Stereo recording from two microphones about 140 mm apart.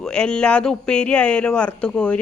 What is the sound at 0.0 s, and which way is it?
Speech, 5° left (ahead or behind).